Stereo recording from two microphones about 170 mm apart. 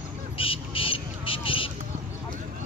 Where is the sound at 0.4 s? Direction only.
30° left (ahead or behind).